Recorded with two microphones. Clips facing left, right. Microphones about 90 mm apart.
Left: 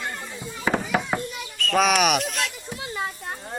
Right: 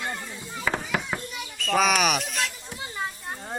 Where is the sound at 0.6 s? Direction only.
25° left (ahead or behind).